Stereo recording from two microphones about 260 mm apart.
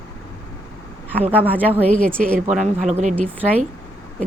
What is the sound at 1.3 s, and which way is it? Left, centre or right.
Speech, centre.